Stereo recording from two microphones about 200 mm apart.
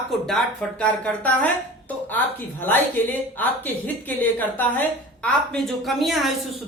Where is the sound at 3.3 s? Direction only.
10° left (ahead or behind).